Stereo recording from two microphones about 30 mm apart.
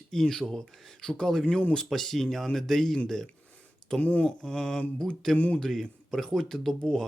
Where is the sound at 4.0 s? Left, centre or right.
Left.